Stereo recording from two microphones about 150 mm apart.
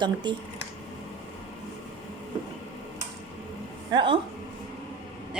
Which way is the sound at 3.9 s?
35° right (ahead or behind).